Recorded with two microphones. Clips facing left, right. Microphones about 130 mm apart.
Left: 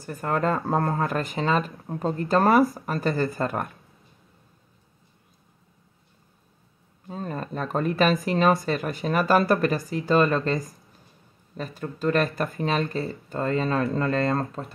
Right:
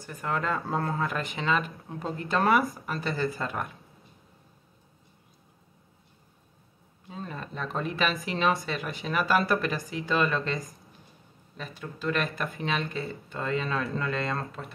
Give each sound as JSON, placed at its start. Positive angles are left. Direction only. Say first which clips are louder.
{"t": 0.0, "sound": "speech", "louder": "left 6 dB", "side_deg": 45}
{"t": 7.1, "sound": "speech", "louder": "left 6 dB", "side_deg": 45}